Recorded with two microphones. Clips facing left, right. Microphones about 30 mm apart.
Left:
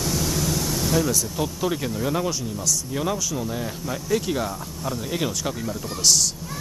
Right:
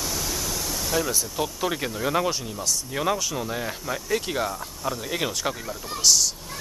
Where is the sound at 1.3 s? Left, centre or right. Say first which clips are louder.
Left 1 dB; centre.